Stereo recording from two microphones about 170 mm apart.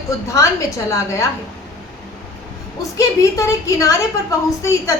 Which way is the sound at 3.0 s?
20° left (ahead or behind).